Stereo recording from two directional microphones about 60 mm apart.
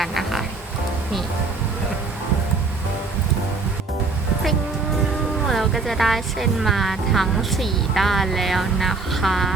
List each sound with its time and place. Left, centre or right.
0.0 s music: centre
5.5 s speech: centre